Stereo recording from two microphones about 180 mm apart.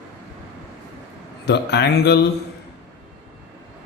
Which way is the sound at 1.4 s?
65° left (ahead or behind).